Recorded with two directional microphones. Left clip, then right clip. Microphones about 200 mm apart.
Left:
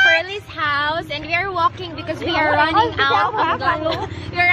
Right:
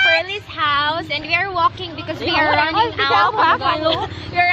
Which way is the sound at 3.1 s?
40° right (ahead or behind).